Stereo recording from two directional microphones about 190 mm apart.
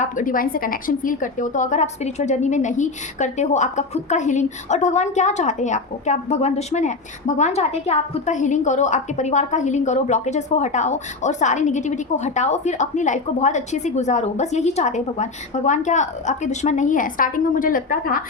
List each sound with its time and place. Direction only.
0.0 s a woman's voice: 45° left (ahead or behind)